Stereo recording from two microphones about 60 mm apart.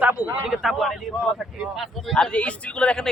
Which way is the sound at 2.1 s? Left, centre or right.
Centre.